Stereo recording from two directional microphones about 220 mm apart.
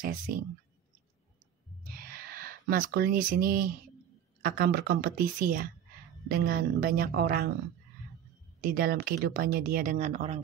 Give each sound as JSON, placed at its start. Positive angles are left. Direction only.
{"t": 0.0, "sound": "speech", "side_deg": -40}
{"t": 2.0, "sound": "a sound", "side_deg": -45}
{"t": 4.4, "sound": "a woman's voice", "side_deg": -45}
{"t": 8.5, "sound": "speech", "side_deg": -40}